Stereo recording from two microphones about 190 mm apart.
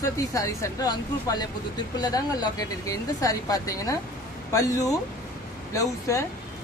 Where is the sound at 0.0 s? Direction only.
15° left (ahead or behind).